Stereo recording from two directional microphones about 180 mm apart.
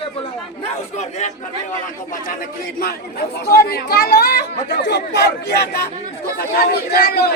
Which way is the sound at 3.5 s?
60° left (ahead or behind).